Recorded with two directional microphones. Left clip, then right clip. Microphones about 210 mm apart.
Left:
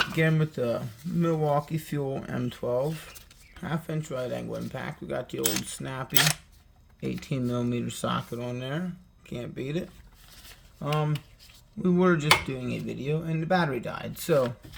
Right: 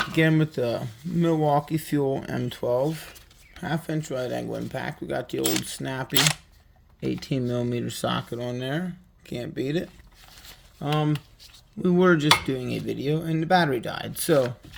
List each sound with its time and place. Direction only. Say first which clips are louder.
0.1 s speech: right 4 dB; 30° right (ahead or behind)